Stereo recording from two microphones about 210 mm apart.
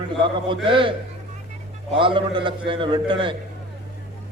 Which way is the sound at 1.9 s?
25° right (ahead or behind).